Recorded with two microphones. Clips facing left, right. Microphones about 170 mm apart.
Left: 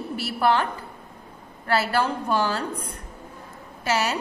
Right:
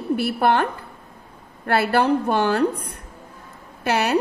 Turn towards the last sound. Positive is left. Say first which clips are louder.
# right 5 dB
turn(degrees=-60)  # may be behind; listen again after turning